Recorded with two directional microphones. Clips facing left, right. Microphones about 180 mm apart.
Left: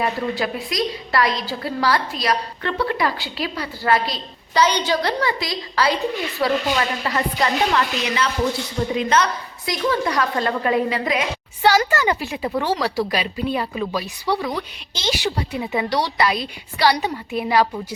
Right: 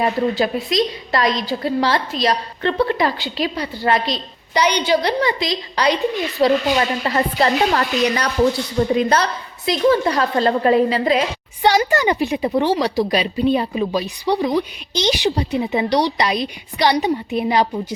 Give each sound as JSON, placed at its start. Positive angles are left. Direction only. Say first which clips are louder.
{"t": 0.0, "sound": "a woman's voice", "louder": "right 5 dB", "side_deg": -25}
{"t": 6.4, "sound": "a woman's voice", "louder": "right 5 dB", "side_deg": -30}
{"t": 11.6, "sound": "a woman's voice", "louder": "right 2 dB", "side_deg": -20}